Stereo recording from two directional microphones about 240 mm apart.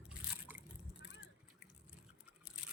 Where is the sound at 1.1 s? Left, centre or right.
Left.